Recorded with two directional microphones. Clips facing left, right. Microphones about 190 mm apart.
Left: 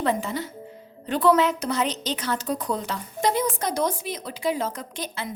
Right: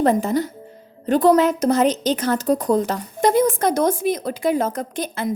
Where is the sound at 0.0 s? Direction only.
45° right (ahead or behind).